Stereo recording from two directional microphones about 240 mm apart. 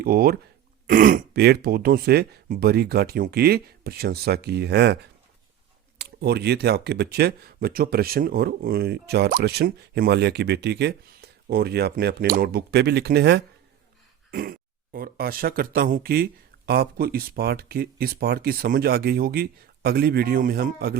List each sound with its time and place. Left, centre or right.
0.0 s speech: right
6.0 s speech: right